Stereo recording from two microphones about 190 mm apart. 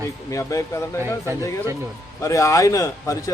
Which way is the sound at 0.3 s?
15° left (ahead or behind).